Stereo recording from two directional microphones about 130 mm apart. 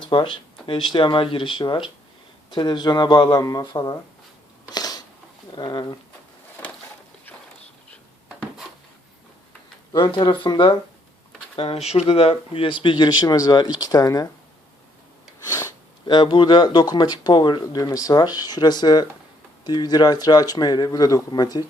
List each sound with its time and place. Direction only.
0.0 s speech: 40° left (ahead or behind)
4.7 s a sound: 30° left (ahead or behind)
5.5 s speech: 35° left (ahead or behind)
9.9 s speech: 35° left (ahead or behind)
11.5 s speech: 50° left (ahead or behind); by 14.3 s 30° left (ahead or behind)
16.0 s speech: 35° left (ahead or behind)